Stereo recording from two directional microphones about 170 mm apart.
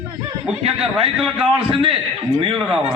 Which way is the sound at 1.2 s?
5° right (ahead or behind).